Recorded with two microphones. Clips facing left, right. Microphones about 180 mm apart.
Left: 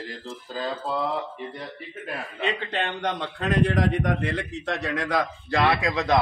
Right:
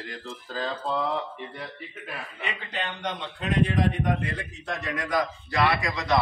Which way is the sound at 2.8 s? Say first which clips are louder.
Left 3 dB; 70° left (ahead or behind).